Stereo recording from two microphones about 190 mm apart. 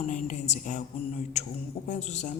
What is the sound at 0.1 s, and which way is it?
A woman's voice, 40° left (ahead or behind).